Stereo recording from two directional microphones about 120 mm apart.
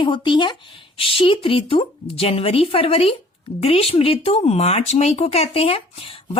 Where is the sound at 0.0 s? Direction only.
45° left (ahead or behind).